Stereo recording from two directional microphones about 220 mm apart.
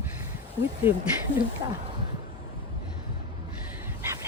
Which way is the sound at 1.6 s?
20° right (ahead or behind).